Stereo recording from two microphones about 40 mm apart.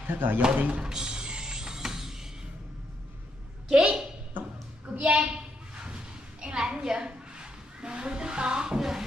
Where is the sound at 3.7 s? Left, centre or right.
Right.